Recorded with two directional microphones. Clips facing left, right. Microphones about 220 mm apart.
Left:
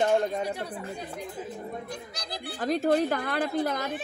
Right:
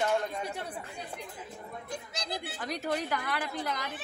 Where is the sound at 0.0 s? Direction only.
40° left (ahead or behind).